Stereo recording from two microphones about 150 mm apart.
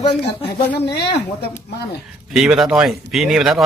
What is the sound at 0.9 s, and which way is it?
Speech, 90° left.